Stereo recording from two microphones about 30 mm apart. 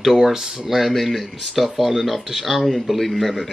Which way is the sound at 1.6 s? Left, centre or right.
Centre.